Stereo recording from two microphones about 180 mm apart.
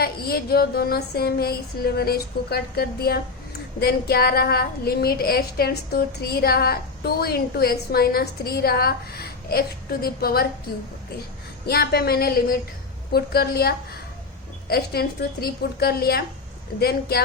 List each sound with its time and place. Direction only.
0.0 s a woman's voice: 60° left (ahead or behind)
11.6 s a woman's voice: 60° left (ahead or behind)